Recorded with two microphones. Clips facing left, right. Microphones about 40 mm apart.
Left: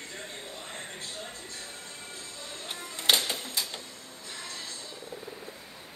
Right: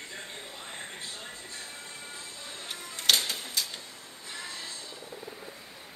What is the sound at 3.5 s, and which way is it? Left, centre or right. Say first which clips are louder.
Printer: even; centre.